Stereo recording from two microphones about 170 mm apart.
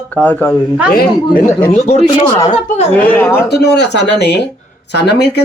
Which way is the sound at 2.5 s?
40° left (ahead or behind).